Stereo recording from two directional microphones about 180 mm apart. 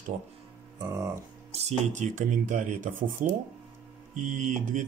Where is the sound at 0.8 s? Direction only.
15° right (ahead or behind).